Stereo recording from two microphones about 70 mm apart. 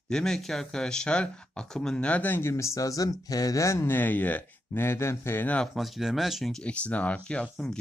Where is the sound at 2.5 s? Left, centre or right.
Left.